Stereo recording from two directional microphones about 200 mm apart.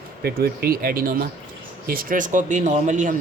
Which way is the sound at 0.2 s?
50° right (ahead or behind).